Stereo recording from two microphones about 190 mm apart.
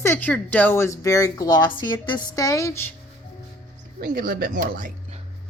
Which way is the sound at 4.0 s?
55° right (ahead or behind).